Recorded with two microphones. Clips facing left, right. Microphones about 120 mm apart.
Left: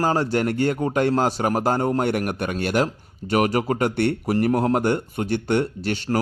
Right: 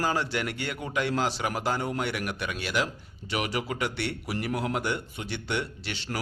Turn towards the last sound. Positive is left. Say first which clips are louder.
# left 11 dB
turn(degrees=45)  # may be behind; listen again after turning